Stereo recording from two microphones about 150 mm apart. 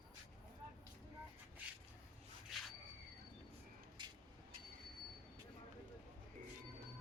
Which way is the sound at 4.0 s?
30° right (ahead or behind).